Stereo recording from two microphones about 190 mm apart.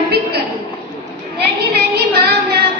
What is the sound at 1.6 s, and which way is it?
Child singing, 55° right (ahead or behind).